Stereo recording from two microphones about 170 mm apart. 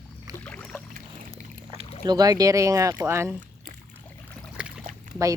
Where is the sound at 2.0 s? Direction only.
20° right (ahead or behind).